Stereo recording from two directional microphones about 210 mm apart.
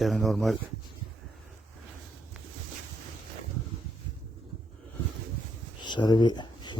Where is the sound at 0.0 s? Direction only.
Centre (ahead or behind).